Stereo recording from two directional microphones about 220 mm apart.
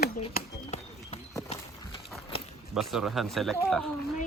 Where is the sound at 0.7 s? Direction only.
30° left (ahead or behind).